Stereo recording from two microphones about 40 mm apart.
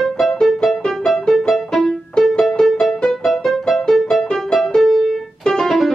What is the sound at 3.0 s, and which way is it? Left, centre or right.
Music, centre.